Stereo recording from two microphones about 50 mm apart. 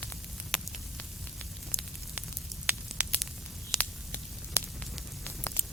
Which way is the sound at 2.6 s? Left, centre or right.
Right.